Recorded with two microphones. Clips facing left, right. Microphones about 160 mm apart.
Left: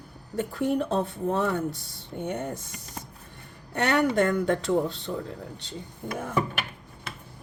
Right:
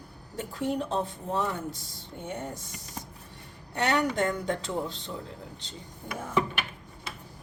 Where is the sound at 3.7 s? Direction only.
55° left (ahead or behind).